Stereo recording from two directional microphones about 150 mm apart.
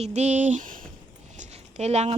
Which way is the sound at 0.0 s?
50° right (ahead or behind).